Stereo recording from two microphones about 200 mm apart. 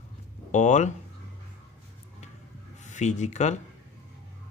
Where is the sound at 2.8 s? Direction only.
35° left (ahead or behind).